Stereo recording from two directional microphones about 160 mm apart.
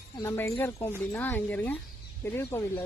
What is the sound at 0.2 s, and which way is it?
Speech, 15° left (ahead or behind).